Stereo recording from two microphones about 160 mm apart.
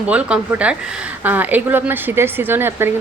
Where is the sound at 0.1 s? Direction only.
10° right (ahead or behind).